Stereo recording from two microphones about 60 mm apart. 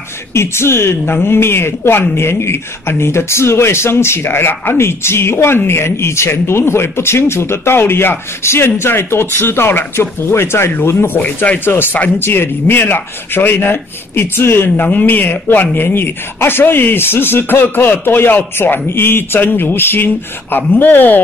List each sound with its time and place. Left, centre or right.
0.3 s speech: left
11.2 s speech: left
11.6 s speech: left
14.9 s speech: left